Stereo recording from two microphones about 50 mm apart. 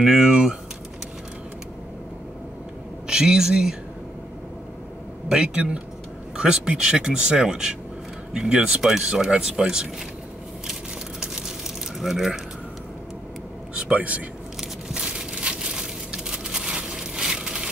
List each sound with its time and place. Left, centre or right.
0.0 s speech: centre
3.1 s speech: centre
5.3 s speech: right
10.7 s a sound: centre
12.0 s speech: centre
13.7 s a man's voice: right
14.6 s a sound: centre